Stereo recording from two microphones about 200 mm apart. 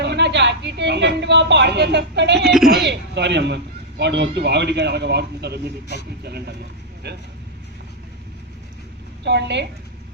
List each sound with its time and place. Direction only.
0.0 s speech: 60° right (ahead or behind)
2.4 s speech: centre (ahead or behind)
2.8 s speech: 60° right (ahead or behind)
9.2 s speech: 60° right (ahead or behind)